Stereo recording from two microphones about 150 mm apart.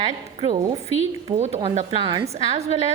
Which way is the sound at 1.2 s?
45° right (ahead or behind).